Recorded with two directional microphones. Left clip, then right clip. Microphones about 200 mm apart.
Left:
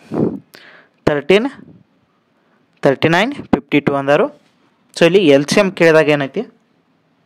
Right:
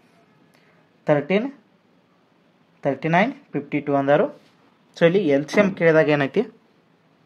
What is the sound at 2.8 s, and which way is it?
Speech, 45° left (ahead or behind).